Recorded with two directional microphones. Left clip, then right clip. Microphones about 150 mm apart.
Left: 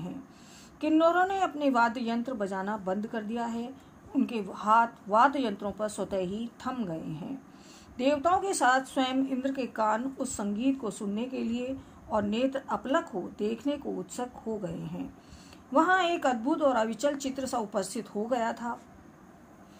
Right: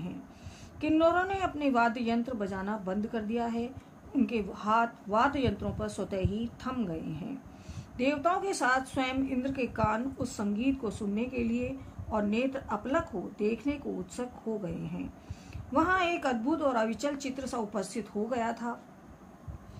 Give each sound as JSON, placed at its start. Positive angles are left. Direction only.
{"t": 0.7, "sound": "a woman's voice", "side_deg": 25}